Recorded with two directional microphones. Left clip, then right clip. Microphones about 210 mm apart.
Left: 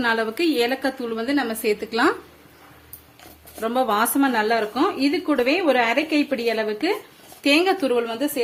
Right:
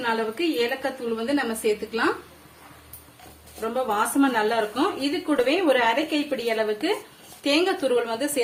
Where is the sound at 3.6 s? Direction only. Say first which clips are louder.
Left 4 dB; 45° left (ahead or behind); by 8.4 s 25° left (ahead or behind).